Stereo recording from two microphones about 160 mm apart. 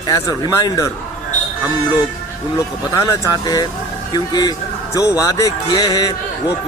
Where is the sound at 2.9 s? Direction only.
20° left (ahead or behind).